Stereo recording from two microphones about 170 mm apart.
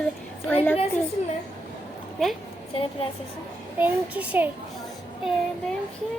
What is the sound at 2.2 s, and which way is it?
Speech, centre (ahead or behind).